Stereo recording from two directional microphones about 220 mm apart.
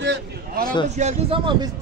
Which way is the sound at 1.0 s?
30° right (ahead or behind).